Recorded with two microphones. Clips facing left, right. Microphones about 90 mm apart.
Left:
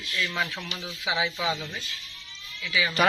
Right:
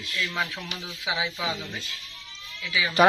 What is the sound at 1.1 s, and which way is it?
Speech, 10° right (ahead or behind).